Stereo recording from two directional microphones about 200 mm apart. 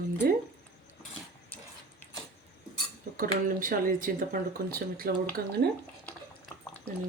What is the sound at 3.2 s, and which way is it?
Speech, 45° right (ahead or behind).